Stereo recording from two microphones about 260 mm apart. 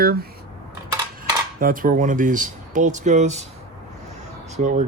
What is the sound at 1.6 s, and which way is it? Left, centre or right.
Speech, right.